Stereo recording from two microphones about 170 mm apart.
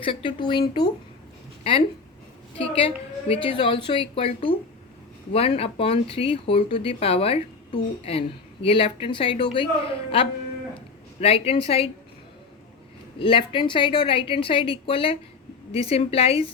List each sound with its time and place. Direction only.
0.0 s speech: 30° left (ahead or behind)
2.6 s speech: 35° left (ahead or behind)
13.1 s speech: 30° left (ahead or behind)